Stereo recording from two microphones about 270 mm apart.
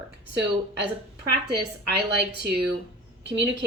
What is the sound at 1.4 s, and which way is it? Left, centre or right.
Speech, right.